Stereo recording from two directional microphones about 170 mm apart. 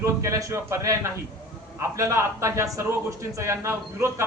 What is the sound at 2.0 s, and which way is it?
Speech, 15° right (ahead or behind).